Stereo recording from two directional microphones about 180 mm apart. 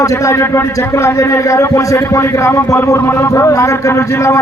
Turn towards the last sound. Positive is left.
turn(degrees=15)  # may be behind; listen again after turning